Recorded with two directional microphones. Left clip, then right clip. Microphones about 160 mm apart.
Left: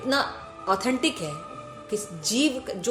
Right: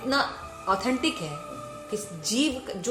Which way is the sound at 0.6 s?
50° left (ahead or behind).